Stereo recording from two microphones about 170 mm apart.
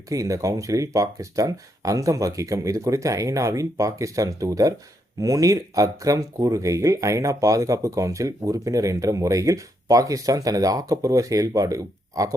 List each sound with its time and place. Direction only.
0.1 s speech: 20° right (ahead or behind)